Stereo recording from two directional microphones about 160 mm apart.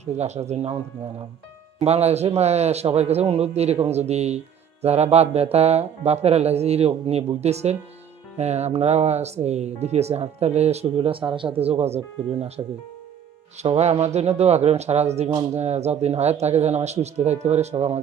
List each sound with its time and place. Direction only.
0.0 s speech: 45° right (ahead or behind)
1.8 s speech: 40° right (ahead or behind)